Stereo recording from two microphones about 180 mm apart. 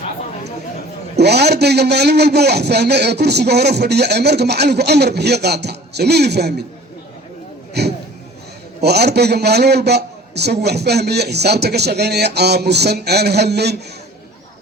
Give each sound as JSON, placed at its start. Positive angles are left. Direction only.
{"t": 1.1, "sound": "a man's voice", "side_deg": -65}
{"t": 7.7, "sound": "a sound", "side_deg": -65}
{"t": 8.8, "sound": "a man's voice", "side_deg": -65}